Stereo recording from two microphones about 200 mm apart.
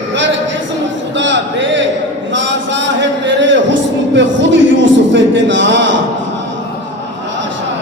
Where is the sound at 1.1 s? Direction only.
65° right (ahead or behind).